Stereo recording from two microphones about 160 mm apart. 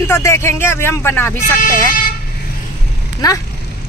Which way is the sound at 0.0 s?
15° left (ahead or behind).